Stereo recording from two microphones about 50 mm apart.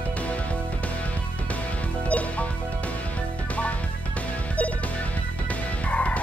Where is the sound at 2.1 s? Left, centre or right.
Left.